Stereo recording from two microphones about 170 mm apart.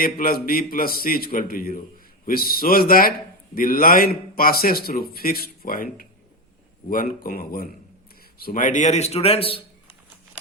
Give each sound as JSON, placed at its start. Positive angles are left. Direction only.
{"t": 0.0, "sound": "a man's voice", "side_deg": 55}